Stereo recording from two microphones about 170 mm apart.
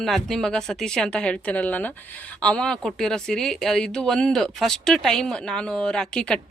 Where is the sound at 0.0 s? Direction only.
Centre (ahead or behind).